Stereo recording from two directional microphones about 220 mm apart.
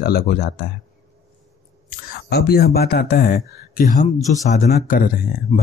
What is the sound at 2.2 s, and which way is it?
Speech, 45° left (ahead or behind).